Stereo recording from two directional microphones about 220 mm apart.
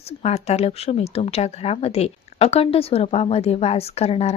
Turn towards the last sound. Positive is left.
turn(degrees=30)  # may be behind; listen again after turning